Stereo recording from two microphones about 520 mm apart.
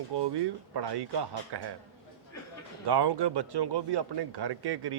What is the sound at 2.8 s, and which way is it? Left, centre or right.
Speech, right.